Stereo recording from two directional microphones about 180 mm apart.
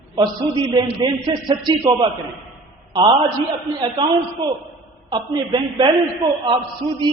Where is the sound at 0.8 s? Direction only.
30° right (ahead or behind).